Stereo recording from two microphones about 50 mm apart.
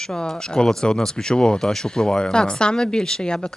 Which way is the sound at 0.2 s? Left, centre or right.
Centre.